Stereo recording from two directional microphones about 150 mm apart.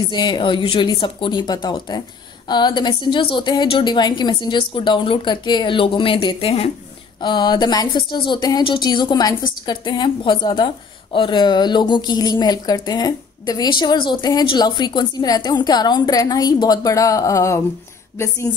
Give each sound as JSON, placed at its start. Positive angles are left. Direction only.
{"t": 0.1, "sound": "speech", "side_deg": 30}